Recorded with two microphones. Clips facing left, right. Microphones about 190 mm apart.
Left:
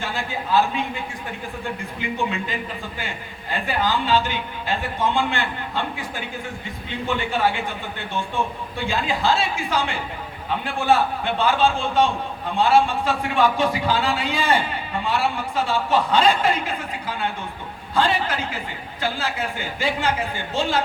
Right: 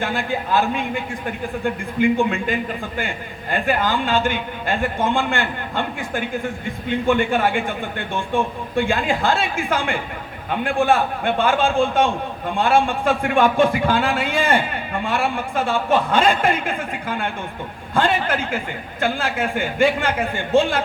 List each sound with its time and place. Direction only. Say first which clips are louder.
0.0 s a man's voice: right 5 dB; 55° right (ahead or behind)